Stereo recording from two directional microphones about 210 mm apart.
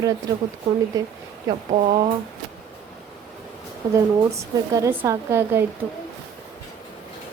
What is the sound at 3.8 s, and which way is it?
Speech, 15° right (ahead or behind).